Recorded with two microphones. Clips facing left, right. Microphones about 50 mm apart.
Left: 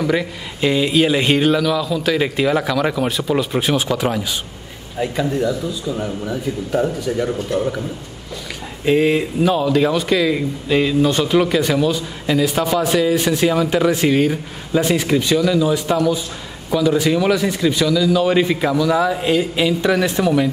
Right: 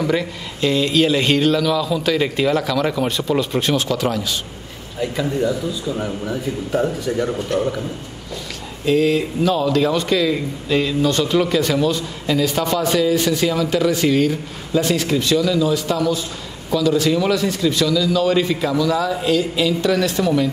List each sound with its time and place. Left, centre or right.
0.0 s speech: centre
5.2 s speech: centre
8.8 s speech: left